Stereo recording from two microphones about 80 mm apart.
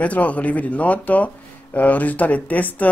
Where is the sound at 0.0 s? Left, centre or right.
Centre.